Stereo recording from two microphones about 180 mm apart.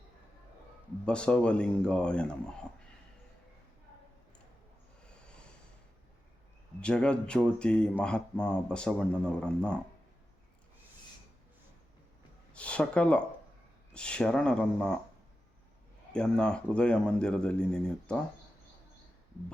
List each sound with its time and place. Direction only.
1.0 s speech: 5° left (ahead or behind)
5.0 s snort: 5° left (ahead or behind)
6.7 s speech: 5° left (ahead or behind)
12.5 s speech: 5° left (ahead or behind)
16.1 s speech: 5° left (ahead or behind)